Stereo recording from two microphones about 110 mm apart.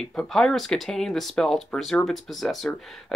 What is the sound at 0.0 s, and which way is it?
Speech, 5° left (ahead or behind).